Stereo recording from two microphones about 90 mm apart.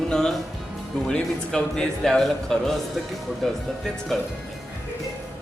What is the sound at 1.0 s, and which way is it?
A man's voice, 5° left (ahead or behind).